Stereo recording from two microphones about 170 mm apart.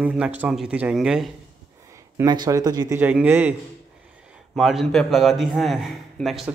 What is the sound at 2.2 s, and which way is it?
Speech, 25° right (ahead or behind).